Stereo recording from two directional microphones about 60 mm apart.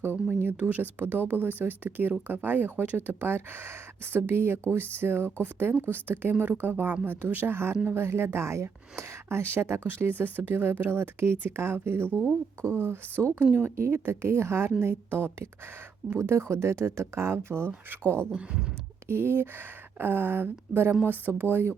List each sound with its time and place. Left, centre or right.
0.6 s speech: right
13.7 s speech: right
17.7 s speech: right
18.3 s speech: centre
19.0 s speech: right